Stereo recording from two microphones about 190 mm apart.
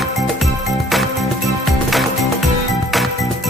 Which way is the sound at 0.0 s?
Centre (ahead or behind).